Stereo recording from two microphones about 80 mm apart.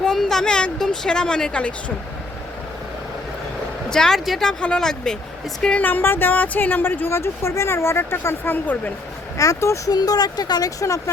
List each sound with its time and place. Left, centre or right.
0.0 s speech: centre
3.8 s speech: centre
5.8 s speech: left
9.4 s speech: left
9.9 s speech: left
10.8 s speech: left